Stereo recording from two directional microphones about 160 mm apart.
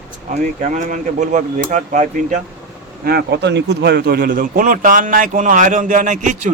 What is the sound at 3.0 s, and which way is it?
Speech, 80° right.